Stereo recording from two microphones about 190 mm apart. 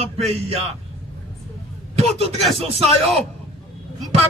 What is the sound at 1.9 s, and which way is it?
Speech, 35° right (ahead or behind).